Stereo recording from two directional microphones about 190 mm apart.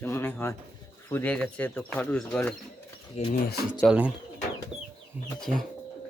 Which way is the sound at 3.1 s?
35° left (ahead or behind).